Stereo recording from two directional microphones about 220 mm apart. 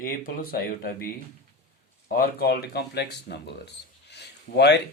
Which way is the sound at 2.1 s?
45° left (ahead or behind).